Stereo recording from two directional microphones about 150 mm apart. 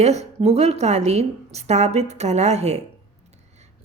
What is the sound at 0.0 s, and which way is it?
A woman's voice, 45° right (ahead or behind).